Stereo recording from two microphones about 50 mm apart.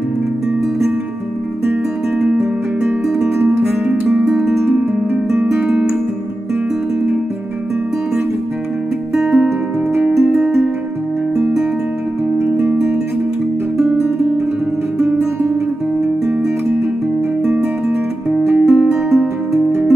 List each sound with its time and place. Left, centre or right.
2.3 s music: centre
3.5 s music: right
4.3 s music: centre
4.6 s music: right
9.1 s music: centre
15.0 s guitar: right
17.5 s music: centre